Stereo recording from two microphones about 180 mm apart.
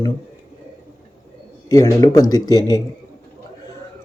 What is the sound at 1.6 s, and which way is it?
Speech, 20° left (ahead or behind).